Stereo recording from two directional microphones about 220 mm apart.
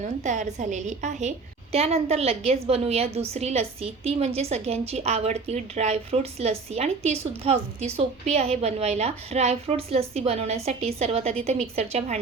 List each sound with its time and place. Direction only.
0.0 s a woman's voice: 35° right (ahead or behind)